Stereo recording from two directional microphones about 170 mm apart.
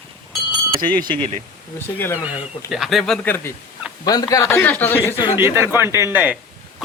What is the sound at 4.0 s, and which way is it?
Speech, 25° left (ahead or behind).